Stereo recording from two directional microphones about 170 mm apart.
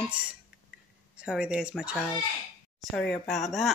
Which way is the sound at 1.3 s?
5° right (ahead or behind).